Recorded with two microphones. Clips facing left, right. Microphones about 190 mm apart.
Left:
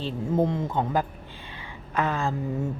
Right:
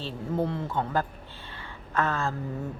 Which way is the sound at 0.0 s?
15° left (ahead or behind).